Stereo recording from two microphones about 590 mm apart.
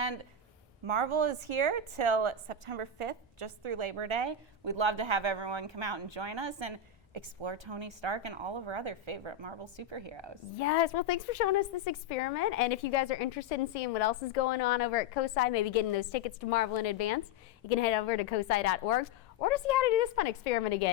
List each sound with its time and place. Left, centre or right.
0.9 s a woman's voice: right
10.6 s a woman's voice: left
17.7 s a woman's voice: left